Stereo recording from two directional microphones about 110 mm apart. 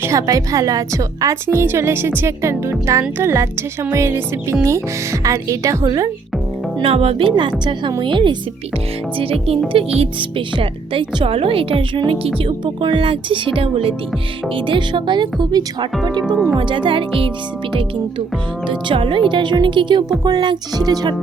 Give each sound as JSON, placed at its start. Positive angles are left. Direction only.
{"t": 0.0, "sound": "a woman's voice", "side_deg": -30}
{"t": 6.8, "sound": "speech", "side_deg": -65}
{"t": 9.1, "sound": "speech", "side_deg": -60}
{"t": 18.7, "sound": "a woman's voice", "side_deg": -50}